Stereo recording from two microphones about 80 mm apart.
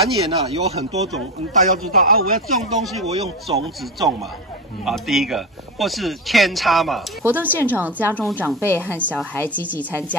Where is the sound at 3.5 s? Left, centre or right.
Right.